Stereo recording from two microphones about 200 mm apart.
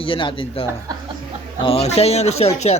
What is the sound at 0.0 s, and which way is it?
Speech, 25° left (ahead or behind).